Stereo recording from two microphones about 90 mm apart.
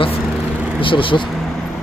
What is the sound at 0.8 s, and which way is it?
Speech, 75° left (ahead or behind).